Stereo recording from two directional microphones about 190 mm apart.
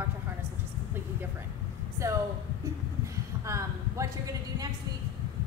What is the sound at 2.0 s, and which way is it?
Speech, 15° right (ahead or behind).